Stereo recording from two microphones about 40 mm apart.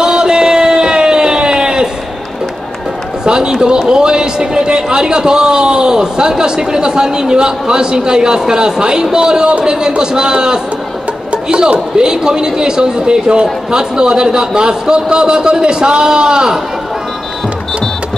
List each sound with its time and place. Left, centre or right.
0.0 s a sound: centre
3.3 s run: centre
3.9 s a man's voice: centre